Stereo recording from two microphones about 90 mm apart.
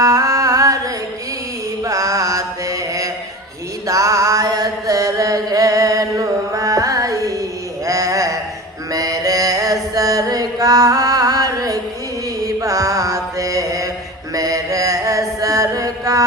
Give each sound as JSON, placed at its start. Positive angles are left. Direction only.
{"t": 0.0, "sound": "a sound", "side_deg": -40}
{"t": 1.8, "sound": "mantra", "side_deg": -40}
{"t": 3.8, "sound": "chant", "side_deg": -40}
{"t": 7.9, "sound": "a sound", "side_deg": -40}
{"t": 8.9, "sound": "mantra", "side_deg": -40}
{"t": 9.9, "sound": "music", "side_deg": -40}
{"t": 12.5, "sound": "mantra", "side_deg": -40}
{"t": 14.3, "sound": "chant", "side_deg": -40}